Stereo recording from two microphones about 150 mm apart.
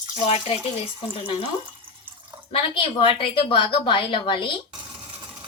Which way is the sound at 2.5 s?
35° left (ahead or behind).